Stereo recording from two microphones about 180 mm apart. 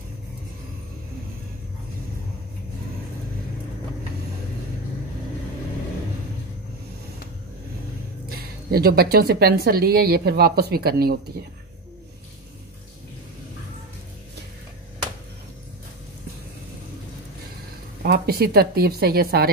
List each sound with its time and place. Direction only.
8.3 s speech: 60° right (ahead or behind)
18.0 s speech: 60° right (ahead or behind)